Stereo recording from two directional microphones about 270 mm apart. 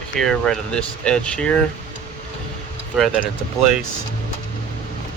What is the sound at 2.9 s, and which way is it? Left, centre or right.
Speech, centre.